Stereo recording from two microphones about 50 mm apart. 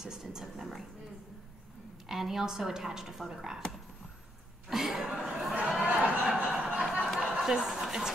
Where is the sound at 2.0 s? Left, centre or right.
Centre.